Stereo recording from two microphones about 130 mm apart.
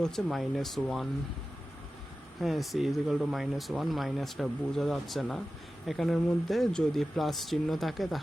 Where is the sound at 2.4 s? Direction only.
Centre (ahead or behind).